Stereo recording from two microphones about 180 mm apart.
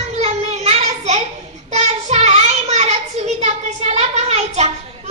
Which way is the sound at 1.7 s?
40° right (ahead or behind).